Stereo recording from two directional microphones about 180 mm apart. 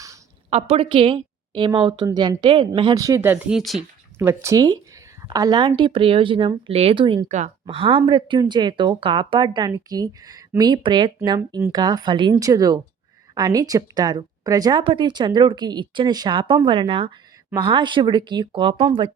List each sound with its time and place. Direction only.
0.5 s speech: 35° right (ahead or behind); by 3.8 s centre (ahead or behind)
4.2 s speech: 15° right (ahead or behind)
7.3 s speech: 40° right (ahead or behind)
7.6 s speech: 30° right (ahead or behind)